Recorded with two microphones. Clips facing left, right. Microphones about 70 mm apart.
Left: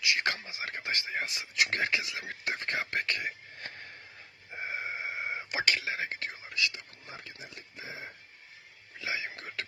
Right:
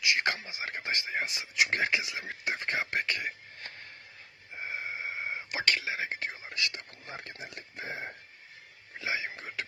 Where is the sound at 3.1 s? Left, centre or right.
Centre.